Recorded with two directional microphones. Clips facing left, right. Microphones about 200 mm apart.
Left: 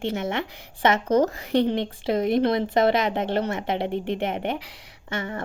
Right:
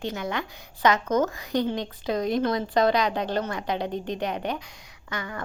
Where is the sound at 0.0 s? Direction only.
25° left (ahead or behind).